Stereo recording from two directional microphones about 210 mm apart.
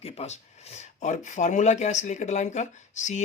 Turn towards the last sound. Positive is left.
turn(degrees=35)  # may be behind; listen again after turning